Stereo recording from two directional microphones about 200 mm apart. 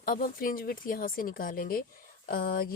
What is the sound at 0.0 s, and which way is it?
Speech, 45° left (ahead or behind).